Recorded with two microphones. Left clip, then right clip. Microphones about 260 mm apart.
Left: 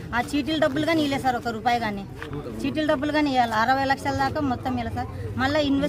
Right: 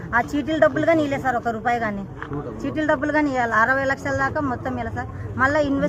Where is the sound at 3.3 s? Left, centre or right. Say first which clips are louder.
Right 2 dB; left.